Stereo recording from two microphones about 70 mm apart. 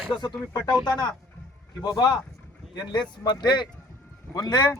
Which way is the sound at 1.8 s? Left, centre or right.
Left.